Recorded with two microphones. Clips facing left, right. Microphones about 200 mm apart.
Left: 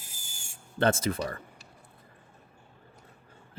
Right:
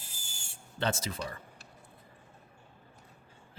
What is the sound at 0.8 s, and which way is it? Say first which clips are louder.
Speech: left 7 dB; 55° left (ahead or behind).